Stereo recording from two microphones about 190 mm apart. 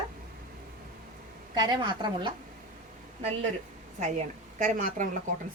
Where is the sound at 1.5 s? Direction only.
20° right (ahead or behind).